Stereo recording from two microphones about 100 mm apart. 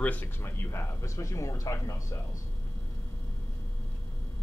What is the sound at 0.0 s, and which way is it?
A man's voice, 15° left (ahead or behind).